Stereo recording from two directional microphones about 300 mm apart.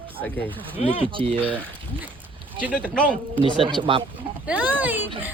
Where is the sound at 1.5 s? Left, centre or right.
Centre.